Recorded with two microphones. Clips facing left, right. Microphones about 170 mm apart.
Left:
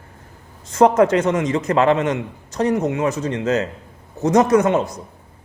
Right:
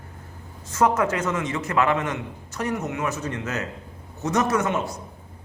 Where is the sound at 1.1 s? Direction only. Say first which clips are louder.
Left 8 dB; 35° left (ahead or behind).